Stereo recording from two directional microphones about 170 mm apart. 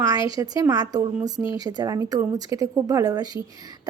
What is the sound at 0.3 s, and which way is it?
Speech, 20° right (ahead or behind).